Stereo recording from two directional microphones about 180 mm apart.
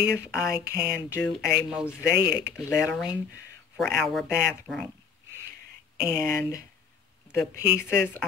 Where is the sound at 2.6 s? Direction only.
5° left (ahead or behind).